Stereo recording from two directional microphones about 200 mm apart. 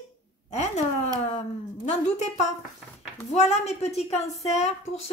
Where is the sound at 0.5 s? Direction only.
35° left (ahead or behind).